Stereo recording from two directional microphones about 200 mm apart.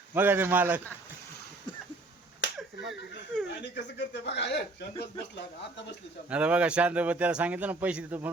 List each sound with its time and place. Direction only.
0.1 s a man's voice: 10° right (ahead or behind)
2.6 s speech: centre (ahead or behind)
3.6 s speech: 60° left (ahead or behind)
6.3 s a man's voice: 5° right (ahead or behind)